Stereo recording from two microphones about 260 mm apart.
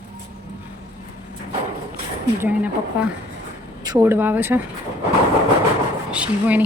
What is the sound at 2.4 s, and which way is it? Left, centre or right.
Speech, centre.